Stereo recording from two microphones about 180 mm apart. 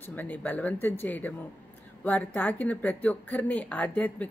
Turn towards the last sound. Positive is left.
turn(degrees=10)  # may be behind; listen again after turning